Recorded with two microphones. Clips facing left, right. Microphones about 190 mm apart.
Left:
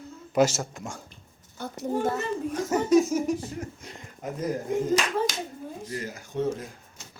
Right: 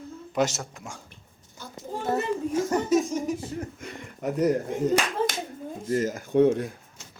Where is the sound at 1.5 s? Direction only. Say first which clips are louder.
Left 7 dB; 65° left (ahead or behind).